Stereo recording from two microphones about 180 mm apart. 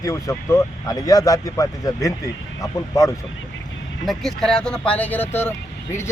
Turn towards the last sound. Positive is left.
turn(degrees=15)  # may be behind; listen again after turning